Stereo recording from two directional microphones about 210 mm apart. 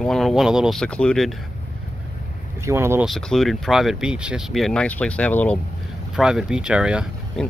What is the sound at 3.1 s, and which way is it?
Speech, centre (ahead or behind).